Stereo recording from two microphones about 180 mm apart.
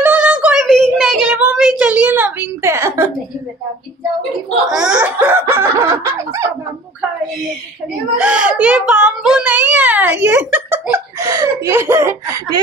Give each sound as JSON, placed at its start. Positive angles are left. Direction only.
{"t": 0.0, "sound": "child singing", "side_deg": -10}
{"t": 4.6, "sound": "laughter", "side_deg": -5}
{"t": 8.2, "sound": "a sound", "side_deg": -5}
{"t": 10.2, "sound": "giggle", "side_deg": -10}